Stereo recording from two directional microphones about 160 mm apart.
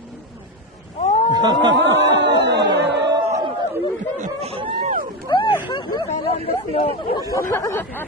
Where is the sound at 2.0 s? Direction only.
90° right.